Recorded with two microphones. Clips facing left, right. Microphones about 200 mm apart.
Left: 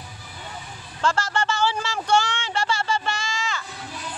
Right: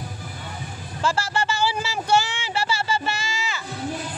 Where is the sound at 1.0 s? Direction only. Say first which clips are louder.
Even; 10° right (ahead or behind).